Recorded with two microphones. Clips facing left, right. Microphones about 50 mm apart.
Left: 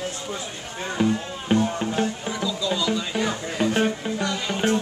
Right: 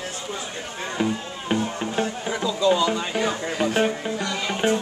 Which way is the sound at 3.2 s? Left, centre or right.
Centre.